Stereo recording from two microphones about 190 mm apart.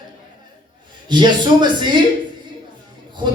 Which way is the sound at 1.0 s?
25° right (ahead or behind).